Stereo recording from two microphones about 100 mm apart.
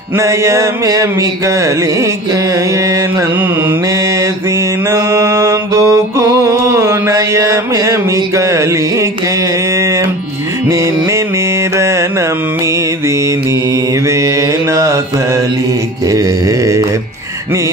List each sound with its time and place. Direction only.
0.2 s a sound: 30° right (ahead or behind)
4.8 s mantra: 30° right (ahead or behind)
9.8 s music: 30° right (ahead or behind)
14.0 s mantra: 30° right (ahead or behind)
16.1 s mantra: 35° right (ahead or behind)